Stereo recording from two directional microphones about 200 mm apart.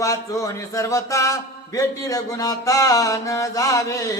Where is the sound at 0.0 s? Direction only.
15° left (ahead or behind).